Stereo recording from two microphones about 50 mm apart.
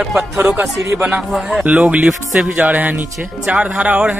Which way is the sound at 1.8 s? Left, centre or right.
Right.